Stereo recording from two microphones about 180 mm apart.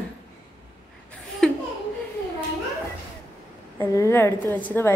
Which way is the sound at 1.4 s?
Centre (ahead or behind).